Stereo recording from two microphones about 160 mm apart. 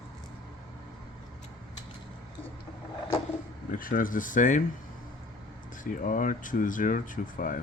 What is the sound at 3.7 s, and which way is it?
Speech, 60° left (ahead or behind).